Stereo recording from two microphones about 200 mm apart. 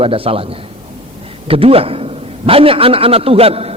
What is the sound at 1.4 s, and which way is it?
A man's voice, 30° right (ahead or behind).